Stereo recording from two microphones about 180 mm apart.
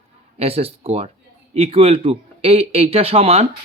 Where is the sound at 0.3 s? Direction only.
35° right (ahead or behind).